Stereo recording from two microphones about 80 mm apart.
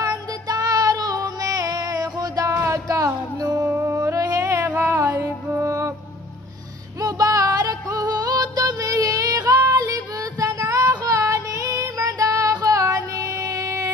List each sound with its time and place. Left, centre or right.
0.0 s child singing: right
2.5 s music: right
3.7 s music: right
7.0 s music: right
9.7 s child singing: right
13.1 s music: right